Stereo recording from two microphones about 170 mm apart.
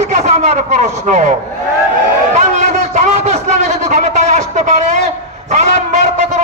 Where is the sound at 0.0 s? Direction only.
40° right (ahead or behind).